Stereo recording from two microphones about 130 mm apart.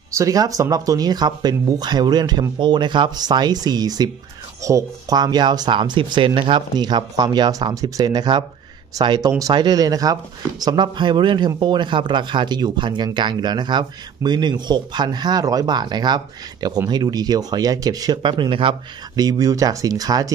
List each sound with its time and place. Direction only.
0.1 s speech: 25° right (ahead or behind)